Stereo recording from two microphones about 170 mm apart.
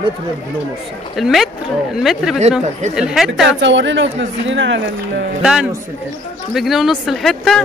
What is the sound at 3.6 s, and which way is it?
Speech, 90° right.